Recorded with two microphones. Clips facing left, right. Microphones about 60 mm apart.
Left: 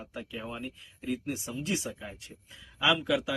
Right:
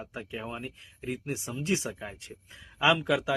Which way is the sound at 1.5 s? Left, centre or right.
Right.